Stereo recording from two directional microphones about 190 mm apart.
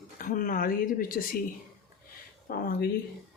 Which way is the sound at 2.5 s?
50° left (ahead or behind).